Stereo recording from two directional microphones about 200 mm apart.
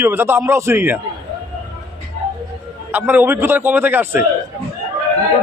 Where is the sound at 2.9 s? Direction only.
10° right (ahead or behind).